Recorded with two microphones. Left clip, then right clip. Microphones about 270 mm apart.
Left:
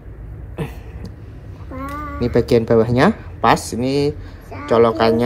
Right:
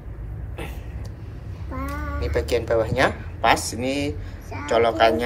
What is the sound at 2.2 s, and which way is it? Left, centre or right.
Speech, left.